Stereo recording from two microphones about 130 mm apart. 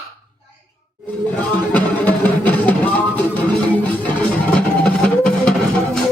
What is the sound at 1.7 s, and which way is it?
Music, 10° left (ahead or behind).